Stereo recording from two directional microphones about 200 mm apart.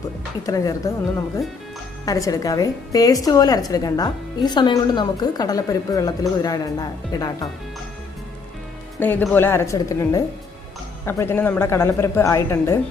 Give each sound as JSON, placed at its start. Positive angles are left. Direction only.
{"t": 0.4, "sound": "a woman's voice", "side_deg": 20}
{"t": 9.0, "sound": "speech", "side_deg": 10}